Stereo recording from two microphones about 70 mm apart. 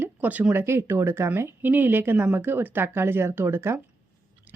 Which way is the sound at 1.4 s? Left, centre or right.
Right.